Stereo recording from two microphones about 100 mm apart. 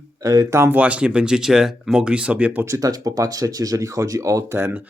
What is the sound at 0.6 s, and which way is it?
Speech, 15° right (ahead or behind).